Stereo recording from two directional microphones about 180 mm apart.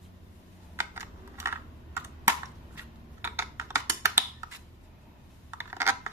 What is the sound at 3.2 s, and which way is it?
Typing, 15° right (ahead or behind).